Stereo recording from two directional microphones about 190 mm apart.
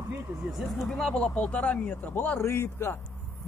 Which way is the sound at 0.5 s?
Centre (ahead or behind).